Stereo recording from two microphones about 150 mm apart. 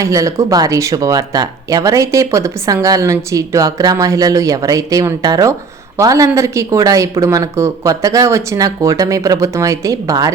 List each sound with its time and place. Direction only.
0.0 s speech: 20° right (ahead or behind)